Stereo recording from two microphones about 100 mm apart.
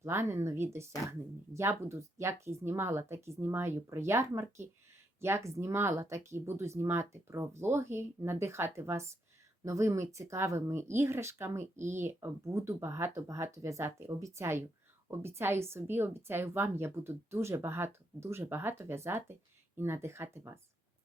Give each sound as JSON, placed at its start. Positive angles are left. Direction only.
{"t": 0.0, "sound": "a woman's voice", "side_deg": -25}